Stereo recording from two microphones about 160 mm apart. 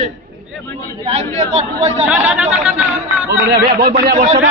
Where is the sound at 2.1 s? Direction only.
5° right (ahead or behind).